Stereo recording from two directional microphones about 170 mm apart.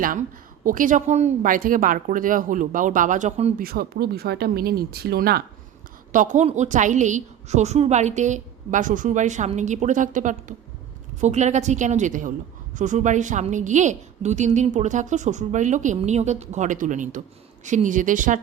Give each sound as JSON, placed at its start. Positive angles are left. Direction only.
{"t": 0.0, "sound": "a woman's voice", "side_deg": -55}
{"t": 3.6, "sound": "speech", "side_deg": -65}
{"t": 6.1, "sound": "a woman's voice", "side_deg": -50}